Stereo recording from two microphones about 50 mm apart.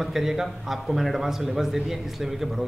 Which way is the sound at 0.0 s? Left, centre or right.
Centre.